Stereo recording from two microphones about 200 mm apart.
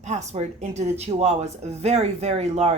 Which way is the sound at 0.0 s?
35° right (ahead or behind).